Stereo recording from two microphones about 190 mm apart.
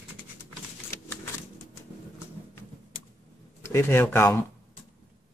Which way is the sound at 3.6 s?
15° left (ahead or behind).